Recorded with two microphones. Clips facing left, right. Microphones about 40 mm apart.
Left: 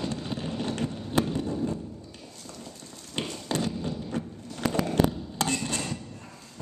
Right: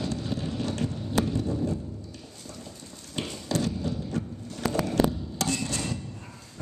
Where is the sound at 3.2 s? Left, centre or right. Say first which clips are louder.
Right 1 dB; left.